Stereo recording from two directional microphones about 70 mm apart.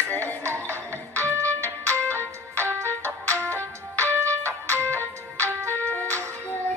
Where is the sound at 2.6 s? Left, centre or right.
Right.